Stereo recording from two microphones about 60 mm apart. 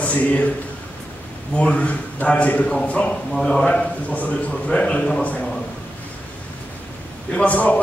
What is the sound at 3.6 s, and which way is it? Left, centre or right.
A man's voice, left.